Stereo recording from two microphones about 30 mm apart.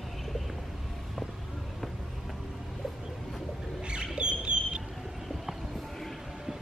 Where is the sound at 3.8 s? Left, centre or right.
Right.